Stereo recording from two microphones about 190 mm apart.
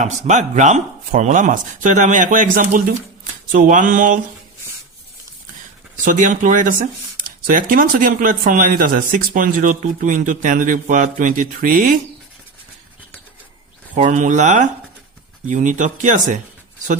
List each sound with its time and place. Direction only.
0.0 s speech: 40° right (ahead or behind)
6.1 s speech: 45° right (ahead or behind)
13.9 s speech: 40° right (ahead or behind)